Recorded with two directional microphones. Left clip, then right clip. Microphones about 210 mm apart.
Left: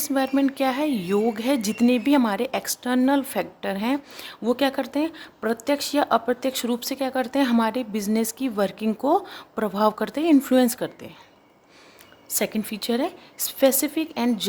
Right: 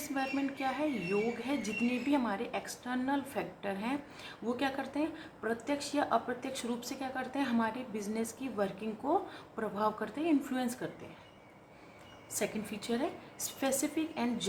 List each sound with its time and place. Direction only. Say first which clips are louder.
0.1 s a woman's voice: left 13 dB; 55° left (ahead or behind)
12.3 s a woman's voice: left 10 dB; 50° left (ahead or behind)